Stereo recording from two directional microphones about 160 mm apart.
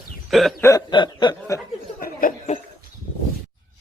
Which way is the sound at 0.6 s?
25° left (ahead or behind).